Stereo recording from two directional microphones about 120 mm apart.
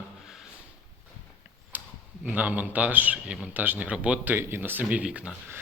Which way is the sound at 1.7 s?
15° right (ahead or behind).